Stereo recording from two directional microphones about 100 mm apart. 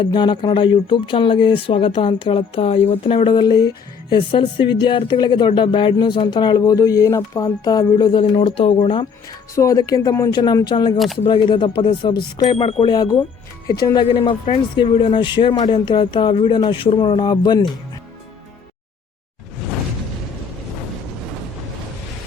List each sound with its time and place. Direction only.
0.0 s speech: 50° left (ahead or behind)
3.3 s speech: 45° left (ahead or behind)
4.1 s speech: 60° left (ahead or behind)
8.3 s speech: 80° left; by 9.0 s 60° left (ahead or behind)
9.6 s speech: 35° left (ahead or behind); by 10.9 s 50° left (ahead or behind)
10.9 s speech: centre (ahead or behind)
11.3 s speech: 55° left (ahead or behind)
12.8 s speech: 40° left (ahead or behind)